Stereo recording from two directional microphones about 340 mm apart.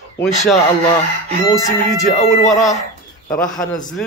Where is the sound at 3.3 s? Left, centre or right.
Centre.